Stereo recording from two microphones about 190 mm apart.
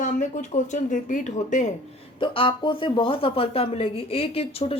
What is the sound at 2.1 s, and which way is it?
Speech, 25° left (ahead or behind).